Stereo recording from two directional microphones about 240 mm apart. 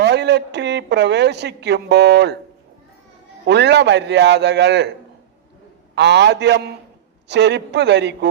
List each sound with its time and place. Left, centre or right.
0.0 s speech: right
3.4 s a man's voice: right
5.9 s a man's voice: right